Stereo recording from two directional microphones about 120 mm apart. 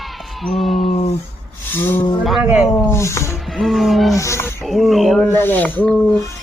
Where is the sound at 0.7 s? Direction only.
70° left (ahead or behind).